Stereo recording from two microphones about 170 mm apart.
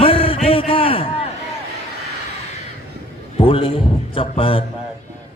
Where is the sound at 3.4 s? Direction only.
30° left (ahead or behind).